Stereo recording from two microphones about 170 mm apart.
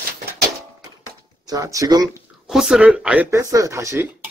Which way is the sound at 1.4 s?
20° right (ahead or behind).